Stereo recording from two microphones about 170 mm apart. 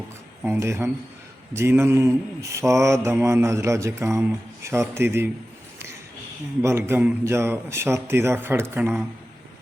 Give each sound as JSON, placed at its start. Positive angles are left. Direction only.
{"t": 0.6, "sound": "mantra", "side_deg": -15}
{"t": 6.6, "sound": "mantra", "side_deg": -15}